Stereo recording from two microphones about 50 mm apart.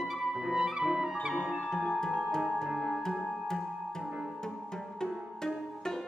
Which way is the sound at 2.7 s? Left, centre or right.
Centre.